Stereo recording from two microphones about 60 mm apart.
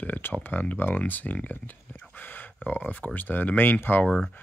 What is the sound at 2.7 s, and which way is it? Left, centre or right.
Speech, left.